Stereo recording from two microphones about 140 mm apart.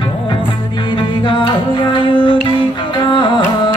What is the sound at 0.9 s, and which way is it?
Music, 35° left (ahead or behind).